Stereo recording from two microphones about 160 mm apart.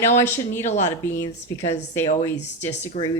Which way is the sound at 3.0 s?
40° left (ahead or behind).